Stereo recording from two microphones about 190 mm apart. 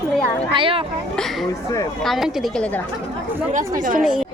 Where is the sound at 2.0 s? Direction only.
Centre (ahead or behind).